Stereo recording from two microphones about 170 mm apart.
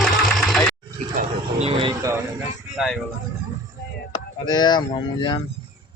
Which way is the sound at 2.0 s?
15° right (ahead or behind).